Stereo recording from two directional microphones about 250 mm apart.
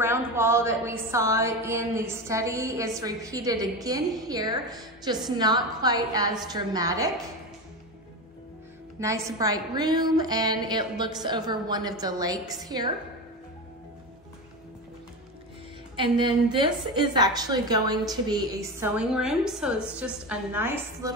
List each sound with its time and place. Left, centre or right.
0.0 s a woman's voice: centre
9.0 s a woman's voice: centre
16.0 s a woman's voice: centre